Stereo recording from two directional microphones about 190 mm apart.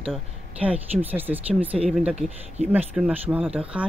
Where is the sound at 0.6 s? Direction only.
10° right (ahead or behind).